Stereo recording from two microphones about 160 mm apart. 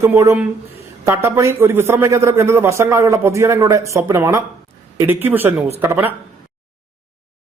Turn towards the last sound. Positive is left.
turn(degrees=-15)  # may be behind; listen again after turning